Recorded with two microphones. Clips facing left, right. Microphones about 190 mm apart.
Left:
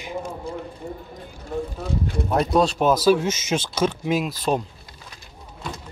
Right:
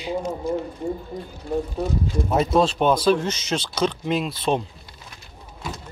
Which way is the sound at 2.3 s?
Centre (ahead or behind).